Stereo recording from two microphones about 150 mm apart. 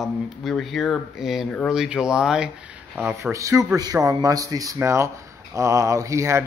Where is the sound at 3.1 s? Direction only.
20° right (ahead or behind).